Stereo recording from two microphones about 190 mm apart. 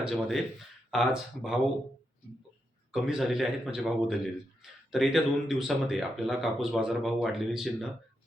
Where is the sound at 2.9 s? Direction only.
Centre (ahead or behind).